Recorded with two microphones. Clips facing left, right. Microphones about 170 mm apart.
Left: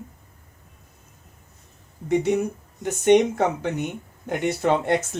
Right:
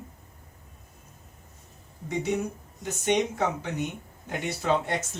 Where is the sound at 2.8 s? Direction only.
60° left (ahead or behind).